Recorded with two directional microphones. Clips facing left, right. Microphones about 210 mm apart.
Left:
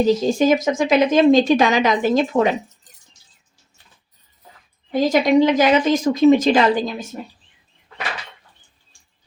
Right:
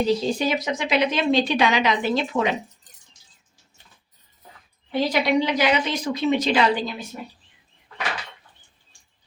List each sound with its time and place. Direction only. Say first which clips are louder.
0.0 s speech: left 6 dB; 45° left (ahead or behind)
4.9 s speech: left 5 dB; 45° left (ahead or behind)